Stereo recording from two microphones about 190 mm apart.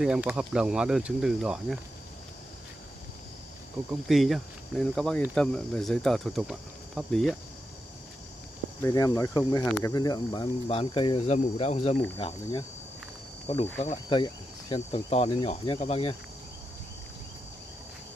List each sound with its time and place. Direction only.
0.0 s speech: 5° right (ahead or behind)
4.1 s speech: centre (ahead or behind)
8.8 s cricket: 20° left (ahead or behind)
9.8 s speech: 20° left (ahead or behind)
13.5 s speech: 30° left (ahead or behind)
14.0 s cricket: 20° left (ahead or behind)
15.0 s speech: 30° left (ahead or behind)